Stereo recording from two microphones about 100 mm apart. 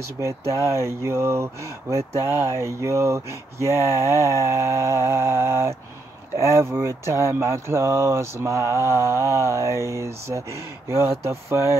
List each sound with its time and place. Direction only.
0.5 s speech: 30° right (ahead or behind)